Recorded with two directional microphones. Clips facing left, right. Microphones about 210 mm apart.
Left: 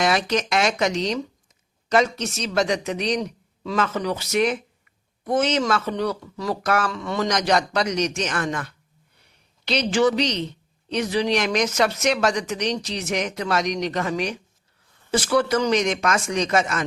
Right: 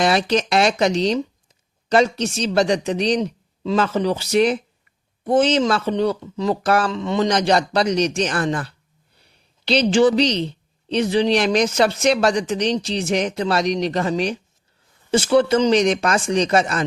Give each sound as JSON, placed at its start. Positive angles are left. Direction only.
{"t": 0.0, "sound": "speech", "side_deg": -30}